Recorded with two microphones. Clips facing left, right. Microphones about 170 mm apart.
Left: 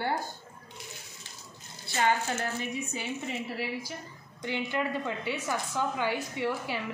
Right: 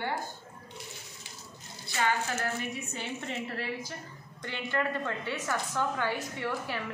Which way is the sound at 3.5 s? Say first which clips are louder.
Left 1 dB; 10° left (ahead or behind).